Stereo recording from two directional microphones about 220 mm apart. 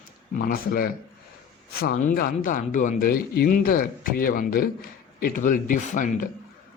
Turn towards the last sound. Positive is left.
turn(degrees=35)  # may be behind; listen again after turning